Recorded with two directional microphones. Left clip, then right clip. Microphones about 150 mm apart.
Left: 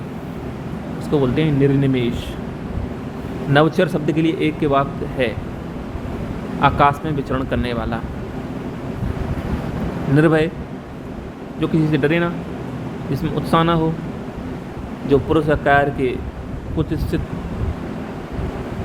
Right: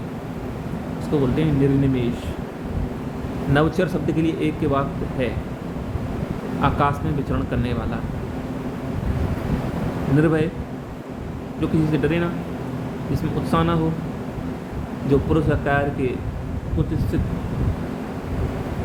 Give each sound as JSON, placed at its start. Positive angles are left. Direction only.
{"t": 1.1, "sound": "speech", "side_deg": 30}
{"t": 3.5, "sound": "speech", "side_deg": 30}
{"t": 6.6, "sound": "speech", "side_deg": 30}
{"t": 10.2, "sound": "speech", "side_deg": 35}
{"t": 11.6, "sound": "speech", "side_deg": 30}
{"t": 15.1, "sound": "speech", "side_deg": 35}